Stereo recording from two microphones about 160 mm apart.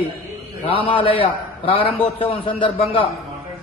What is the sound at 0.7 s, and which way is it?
A man's voice, 30° left (ahead or behind).